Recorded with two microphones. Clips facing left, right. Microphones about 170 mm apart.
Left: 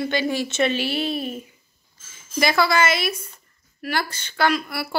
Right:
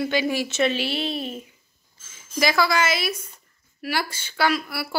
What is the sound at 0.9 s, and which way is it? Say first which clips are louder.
Speech: left 2 dB; 50° left (ahead or behind).